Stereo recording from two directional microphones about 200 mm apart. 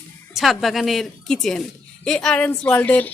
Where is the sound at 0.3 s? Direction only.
Centre (ahead or behind).